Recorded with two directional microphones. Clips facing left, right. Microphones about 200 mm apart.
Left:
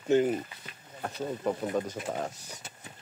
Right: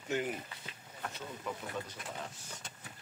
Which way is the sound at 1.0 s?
45° left (ahead or behind).